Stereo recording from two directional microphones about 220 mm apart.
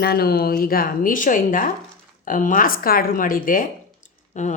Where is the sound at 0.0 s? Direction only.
45° left (ahead or behind).